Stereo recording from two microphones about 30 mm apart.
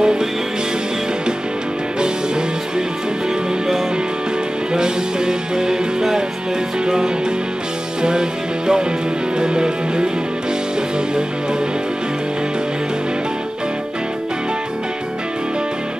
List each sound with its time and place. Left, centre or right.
0.0 s music: right
4.7 s music: right
8.0 s music: right